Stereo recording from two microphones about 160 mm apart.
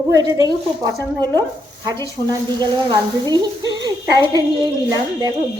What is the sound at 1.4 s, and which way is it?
Speech, 25° right (ahead or behind).